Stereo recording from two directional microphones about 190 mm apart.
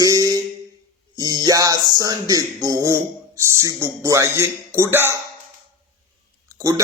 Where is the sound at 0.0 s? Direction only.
20° right (ahead or behind).